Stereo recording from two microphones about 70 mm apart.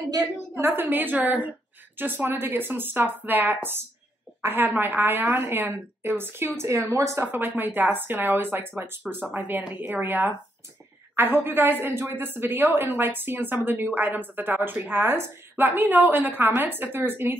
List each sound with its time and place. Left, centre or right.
0.6 s a woman's voice: right
7.2 s a woman's voice: right